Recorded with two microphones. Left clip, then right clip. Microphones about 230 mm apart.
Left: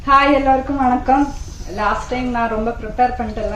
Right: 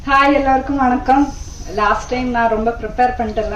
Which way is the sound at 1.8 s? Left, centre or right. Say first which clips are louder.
Right 3 dB; right.